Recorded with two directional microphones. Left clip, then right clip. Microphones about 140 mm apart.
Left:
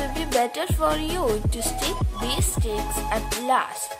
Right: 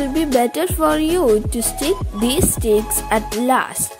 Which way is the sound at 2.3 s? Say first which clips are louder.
Right 12 dB; 45° right (ahead or behind).